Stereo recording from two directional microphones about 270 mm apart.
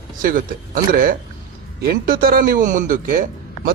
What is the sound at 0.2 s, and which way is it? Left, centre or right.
A man's voice, right.